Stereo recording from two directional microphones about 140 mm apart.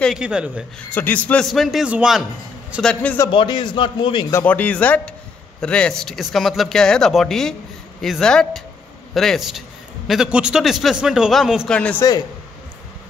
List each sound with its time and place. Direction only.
0.0 s speech: 5° right (ahead or behind)
0.7 s speech: 10° left (ahead or behind); by 2.2 s 5° right (ahead or behind)
2.8 s speech: 10° left (ahead or behind)
3.3 s a man's voice: 35° left (ahead or behind)
4.3 s speech: 15° left (ahead or behind)